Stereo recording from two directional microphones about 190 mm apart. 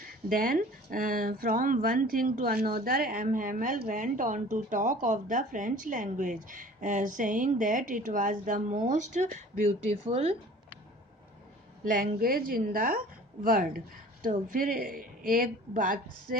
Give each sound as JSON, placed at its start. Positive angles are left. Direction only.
{"t": 0.3, "sound": "speech", "side_deg": -50}
{"t": 11.9, "sound": "speech", "side_deg": -45}